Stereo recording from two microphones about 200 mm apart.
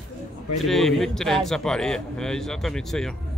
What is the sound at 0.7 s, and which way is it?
A man's voice, centre (ahead or behind).